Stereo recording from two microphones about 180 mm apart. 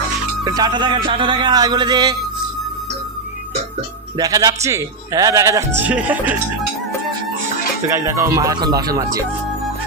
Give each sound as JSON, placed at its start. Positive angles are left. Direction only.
{"t": 0.4, "sound": "speech", "side_deg": -20}
{"t": 4.2, "sound": "a man's voice", "side_deg": -20}
{"t": 7.9, "sound": "a man's voice", "side_deg": -15}